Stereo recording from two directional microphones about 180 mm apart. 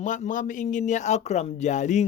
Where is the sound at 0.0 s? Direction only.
45° left (ahead or behind).